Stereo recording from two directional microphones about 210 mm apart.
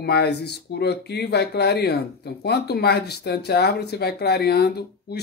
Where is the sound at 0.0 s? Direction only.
50° left (ahead or behind).